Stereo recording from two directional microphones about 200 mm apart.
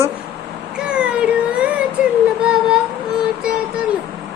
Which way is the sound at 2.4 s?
5° right (ahead or behind).